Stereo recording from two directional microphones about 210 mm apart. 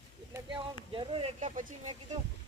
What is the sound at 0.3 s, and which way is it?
Speech, 20° right (ahead or behind).